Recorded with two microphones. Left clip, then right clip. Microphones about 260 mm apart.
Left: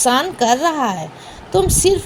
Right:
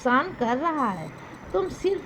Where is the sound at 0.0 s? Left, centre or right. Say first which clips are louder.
Left 8 dB; right.